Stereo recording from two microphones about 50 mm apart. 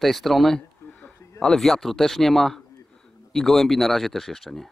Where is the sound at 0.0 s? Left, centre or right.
Centre.